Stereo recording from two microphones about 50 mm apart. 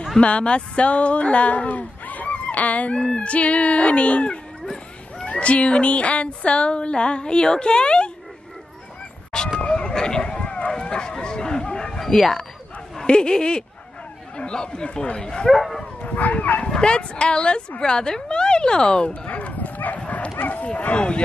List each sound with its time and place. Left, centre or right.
0.2 s speech: left
9.6 s a sound: centre
13.0 s speech: centre
15.8 s dog: centre
16.2 s dog: left
16.6 s speech: centre